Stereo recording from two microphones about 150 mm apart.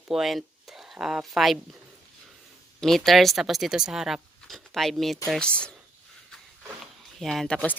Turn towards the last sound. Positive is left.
turn(degrees=5)  # may be behind; listen again after turning